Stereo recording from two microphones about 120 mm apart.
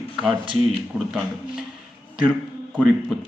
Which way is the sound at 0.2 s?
10° right (ahead or behind).